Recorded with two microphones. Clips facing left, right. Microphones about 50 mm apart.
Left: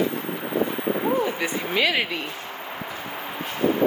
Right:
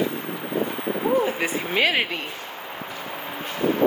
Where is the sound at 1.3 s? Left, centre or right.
Right.